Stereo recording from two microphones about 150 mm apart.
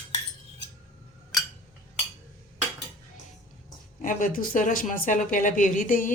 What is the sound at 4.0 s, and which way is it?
A woman's voice, 65° left (ahead or behind).